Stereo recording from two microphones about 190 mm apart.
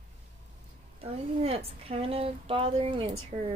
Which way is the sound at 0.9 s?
30° right (ahead or behind).